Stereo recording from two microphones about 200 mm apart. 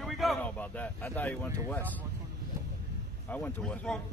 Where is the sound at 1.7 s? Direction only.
10° left (ahead or behind).